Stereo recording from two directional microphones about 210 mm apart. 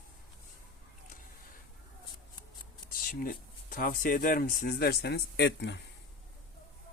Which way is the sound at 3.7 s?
40° left (ahead or behind).